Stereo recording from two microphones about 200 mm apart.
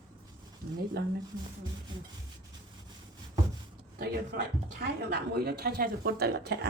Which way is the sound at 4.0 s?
50° right (ahead or behind).